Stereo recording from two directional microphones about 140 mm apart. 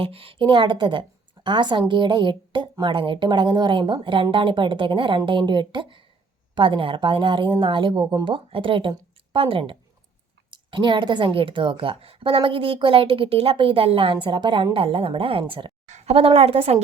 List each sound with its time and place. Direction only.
0.0 s speech: 40° right (ahead or behind)
15.9 s a woman's voice: 50° right (ahead or behind)